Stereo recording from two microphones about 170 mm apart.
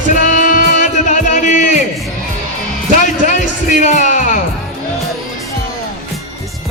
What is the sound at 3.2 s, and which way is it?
Speech, 45° left (ahead or behind).